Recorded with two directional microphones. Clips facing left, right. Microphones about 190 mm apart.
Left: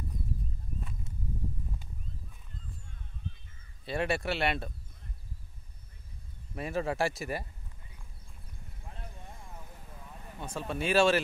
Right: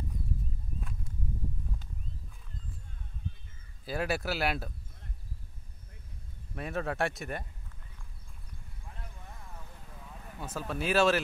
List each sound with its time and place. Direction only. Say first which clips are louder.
3.8 s speech: left 1 dB; centre (ahead or behind)
6.5 s speech: left 2 dB; centre (ahead or behind)
8.8 s a sound: left 2 dB; 30° left (ahead or behind)
9.5 s vehicle: left 1 dB; 15° left (ahead or behind)